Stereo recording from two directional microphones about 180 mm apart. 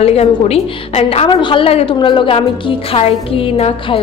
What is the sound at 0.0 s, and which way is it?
A woman's voice, 35° left (ahead or behind).